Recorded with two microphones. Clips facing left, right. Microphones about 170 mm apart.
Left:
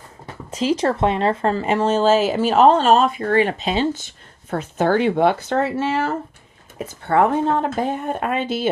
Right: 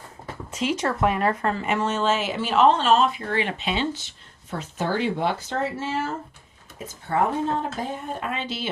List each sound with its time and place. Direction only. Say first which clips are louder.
0.5 s speech: left 6 dB; 35° left (ahead or behind)
4.5 s speech: left 8 dB; 55° left (ahead or behind)